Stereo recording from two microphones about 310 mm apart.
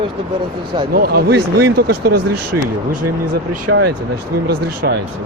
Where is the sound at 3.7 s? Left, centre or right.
Right.